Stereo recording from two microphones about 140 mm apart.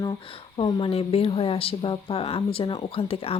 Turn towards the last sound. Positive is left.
turn(degrees=40)  # may be behind; listen again after turning